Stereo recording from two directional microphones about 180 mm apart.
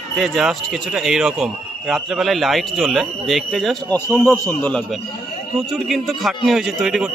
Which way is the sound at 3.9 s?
15° left (ahead or behind).